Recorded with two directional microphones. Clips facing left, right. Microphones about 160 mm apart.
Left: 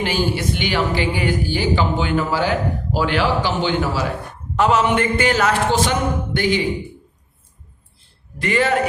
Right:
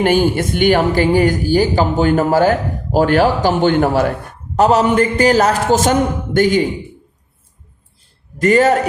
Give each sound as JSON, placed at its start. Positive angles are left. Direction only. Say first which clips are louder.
{"t": 0.0, "sound": "speech", "louder": "right 7 dB", "side_deg": -50}
{"t": 4.5, "sound": "a man's voice", "louder": "right 5 dB", "side_deg": -40}
{"t": 8.4, "sound": "a man's voice", "louder": "right 6 dB", "side_deg": -40}